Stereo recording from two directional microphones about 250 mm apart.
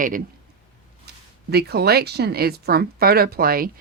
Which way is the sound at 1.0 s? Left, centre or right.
Right.